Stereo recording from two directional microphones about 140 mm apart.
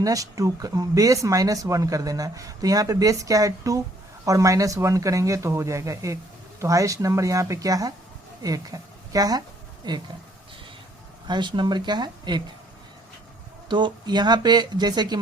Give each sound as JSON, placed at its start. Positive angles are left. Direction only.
{"t": 0.0, "sound": "a woman's voice", "side_deg": -25}
{"t": 11.3, "sound": "speech", "side_deg": -35}
{"t": 13.7, "sound": "speech", "side_deg": -35}